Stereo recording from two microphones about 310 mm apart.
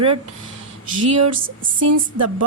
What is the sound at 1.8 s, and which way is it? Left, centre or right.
Speech, right.